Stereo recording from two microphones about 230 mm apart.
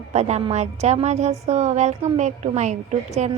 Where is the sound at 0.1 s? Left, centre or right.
Right.